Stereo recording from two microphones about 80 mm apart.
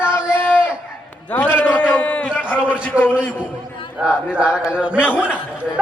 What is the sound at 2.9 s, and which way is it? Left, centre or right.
A man's voice, centre.